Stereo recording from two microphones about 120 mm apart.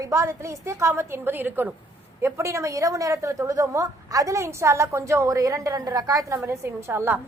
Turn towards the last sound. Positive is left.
turn(degrees=-20)  # may be behind; listen again after turning